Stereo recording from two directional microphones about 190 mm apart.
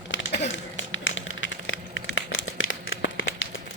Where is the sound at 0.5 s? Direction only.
90° left.